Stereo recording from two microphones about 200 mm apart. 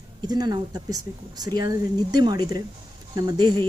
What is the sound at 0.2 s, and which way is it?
Speech, 20° right (ahead or behind).